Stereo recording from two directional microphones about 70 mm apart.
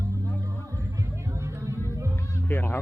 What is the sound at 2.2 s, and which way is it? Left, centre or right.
Music, left.